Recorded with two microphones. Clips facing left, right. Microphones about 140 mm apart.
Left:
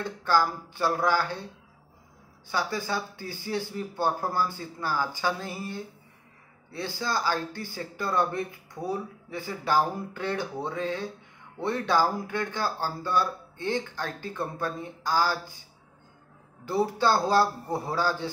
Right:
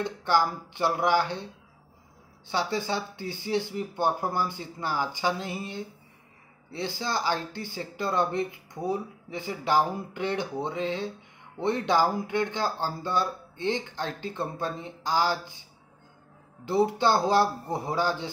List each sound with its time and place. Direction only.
0.0 s speech: 20° right (ahead or behind)
2.4 s speech: 25° right (ahead or behind)
16.6 s speech: 20° right (ahead or behind)